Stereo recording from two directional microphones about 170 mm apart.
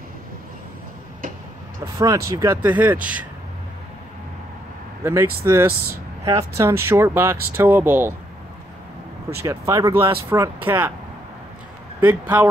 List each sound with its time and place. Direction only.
2.0 s speech: 20° right (ahead or behind)
5.0 s speech: 15° right (ahead or behind)
9.4 s speech: 15° right (ahead or behind)
12.0 s speech: 10° right (ahead or behind)